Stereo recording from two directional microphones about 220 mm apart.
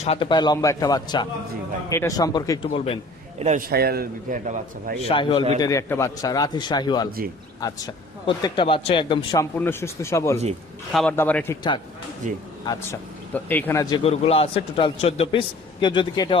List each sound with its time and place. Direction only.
0.0 s a man's voice: 25° left (ahead or behind)
3.3 s a man's voice: 30° right (ahead or behind)
5.0 s a man's voice: 25° left (ahead or behind)
12.2 s a man's voice: 35° right (ahead or behind)
12.6 s a man's voice: 15° left (ahead or behind)
13.9 s a man's voice: 25° left (ahead or behind)